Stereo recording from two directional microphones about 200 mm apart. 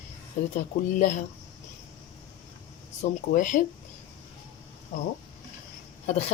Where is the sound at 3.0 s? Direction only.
40° left (ahead or behind).